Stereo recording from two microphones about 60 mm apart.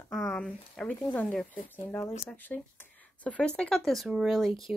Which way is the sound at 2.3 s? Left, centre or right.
Left.